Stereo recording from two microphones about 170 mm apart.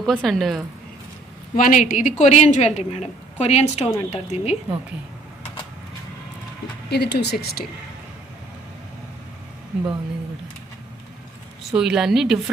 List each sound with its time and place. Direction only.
0.0 s a woman's voice: centre (ahead or behind)
1.5 s a woman's voice: 50° left (ahead or behind)
6.9 s speech: 80° left
11.7 s a woman's voice: 5° right (ahead or behind)